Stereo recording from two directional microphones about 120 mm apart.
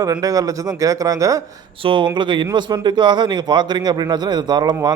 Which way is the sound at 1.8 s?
45° right (ahead or behind).